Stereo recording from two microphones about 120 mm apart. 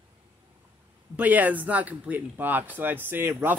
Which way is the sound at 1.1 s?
15° right (ahead or behind).